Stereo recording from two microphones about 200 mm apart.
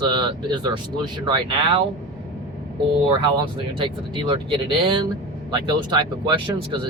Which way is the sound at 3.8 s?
25° right (ahead or behind).